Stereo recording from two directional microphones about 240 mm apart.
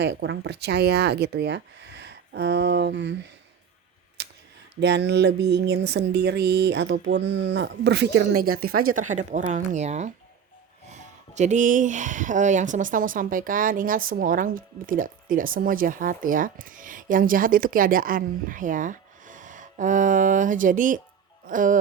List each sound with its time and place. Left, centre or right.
0.0 s speech: right
4.2 s a sound: right
4.8 s speech: right